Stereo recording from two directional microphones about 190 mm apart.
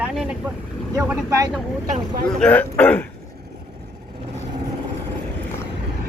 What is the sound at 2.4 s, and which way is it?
Speech, 5° left (ahead or behind).